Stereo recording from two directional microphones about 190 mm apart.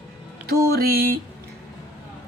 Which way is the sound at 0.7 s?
55° right (ahead or behind).